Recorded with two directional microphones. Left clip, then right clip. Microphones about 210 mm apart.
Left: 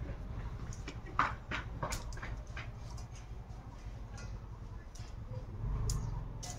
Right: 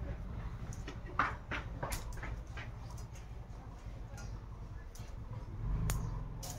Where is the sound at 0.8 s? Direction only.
55° left (ahead or behind).